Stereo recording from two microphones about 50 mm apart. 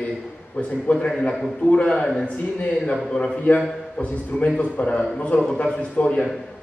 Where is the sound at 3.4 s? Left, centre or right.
Left.